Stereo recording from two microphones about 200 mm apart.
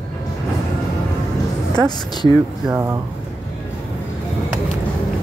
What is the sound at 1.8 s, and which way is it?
Speech, 20° left (ahead or behind).